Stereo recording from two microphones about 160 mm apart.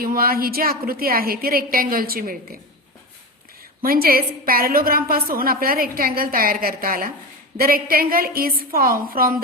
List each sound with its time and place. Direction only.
0.0 s a woman's voice: 65° right (ahead or behind)
3.8 s a woman's voice: 65° right (ahead or behind)